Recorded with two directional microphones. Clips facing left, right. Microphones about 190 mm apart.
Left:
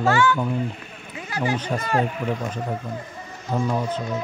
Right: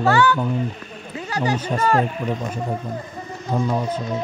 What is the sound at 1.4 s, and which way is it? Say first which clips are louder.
Speech: right 3 dB; 40° right (ahead or behind).